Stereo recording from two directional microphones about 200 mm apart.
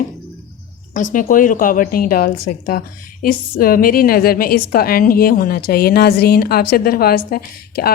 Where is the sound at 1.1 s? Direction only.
40° left (ahead or behind).